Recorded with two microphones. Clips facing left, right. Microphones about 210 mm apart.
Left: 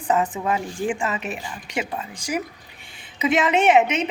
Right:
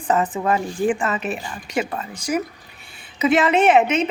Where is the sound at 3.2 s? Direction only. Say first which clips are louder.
Right 3 dB; 15° left (ahead or behind).